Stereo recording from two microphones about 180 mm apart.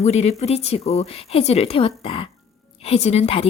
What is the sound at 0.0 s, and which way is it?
A woman's voice, 40° left (ahead or behind).